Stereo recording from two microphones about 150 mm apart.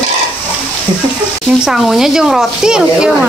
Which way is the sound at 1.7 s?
Centre (ahead or behind).